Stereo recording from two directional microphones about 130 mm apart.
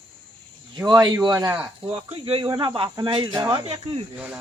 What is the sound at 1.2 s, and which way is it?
Speech, 30° right (ahead or behind).